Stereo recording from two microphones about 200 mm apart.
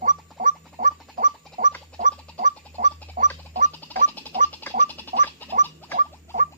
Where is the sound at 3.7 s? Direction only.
10° left (ahead or behind).